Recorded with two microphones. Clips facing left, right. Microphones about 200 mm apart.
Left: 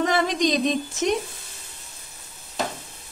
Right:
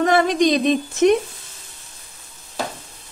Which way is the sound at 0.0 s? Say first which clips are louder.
Right 5 dB; 55° right (ahead or behind).